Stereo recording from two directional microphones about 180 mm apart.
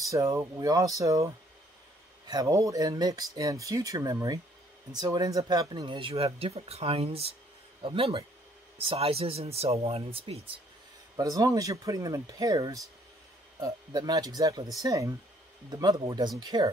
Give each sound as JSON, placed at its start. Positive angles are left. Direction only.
{"t": 0.0, "sound": "speech", "side_deg": -15}
{"t": 11.1, "sound": "speech", "side_deg": -20}